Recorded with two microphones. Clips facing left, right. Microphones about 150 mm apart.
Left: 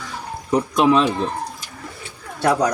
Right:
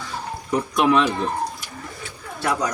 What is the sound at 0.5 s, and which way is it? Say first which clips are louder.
Speech: left 3 dB; 25° left (ahead or behind).